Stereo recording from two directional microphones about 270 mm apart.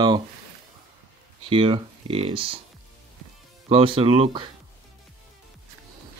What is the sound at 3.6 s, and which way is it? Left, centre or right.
Speech, right.